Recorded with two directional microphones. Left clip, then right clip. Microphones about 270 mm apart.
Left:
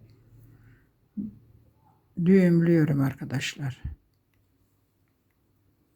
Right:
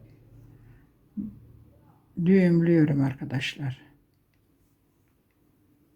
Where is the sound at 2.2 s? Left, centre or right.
Centre.